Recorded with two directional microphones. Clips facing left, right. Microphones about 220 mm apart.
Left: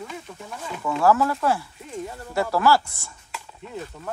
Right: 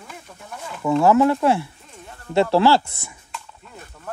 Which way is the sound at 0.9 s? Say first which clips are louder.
Right 5 dB; 25° right (ahead or behind).